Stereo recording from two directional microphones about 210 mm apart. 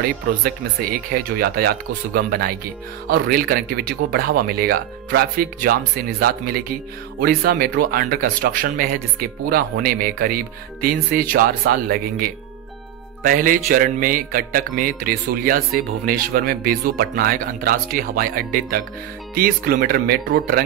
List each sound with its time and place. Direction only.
0.0 s speech: 45° right (ahead or behind)